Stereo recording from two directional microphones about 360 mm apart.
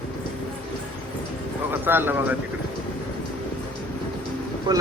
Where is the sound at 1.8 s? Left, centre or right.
Centre.